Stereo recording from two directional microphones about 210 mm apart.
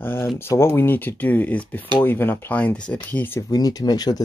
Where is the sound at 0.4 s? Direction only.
10° left (ahead or behind).